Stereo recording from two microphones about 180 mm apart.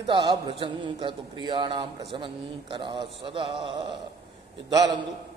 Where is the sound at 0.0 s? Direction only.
25° right (ahead or behind).